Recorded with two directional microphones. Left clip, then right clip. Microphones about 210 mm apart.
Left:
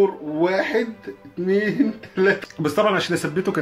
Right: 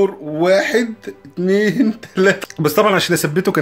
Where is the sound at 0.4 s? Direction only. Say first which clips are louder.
Right 6 dB; 50° right (ahead or behind).